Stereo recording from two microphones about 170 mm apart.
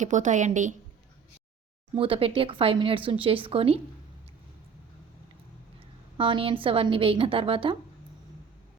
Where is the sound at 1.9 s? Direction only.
35° right (ahead or behind).